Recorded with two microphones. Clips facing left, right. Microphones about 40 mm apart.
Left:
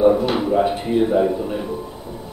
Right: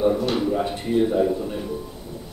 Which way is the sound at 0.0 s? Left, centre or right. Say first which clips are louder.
Left 5 dB; centre.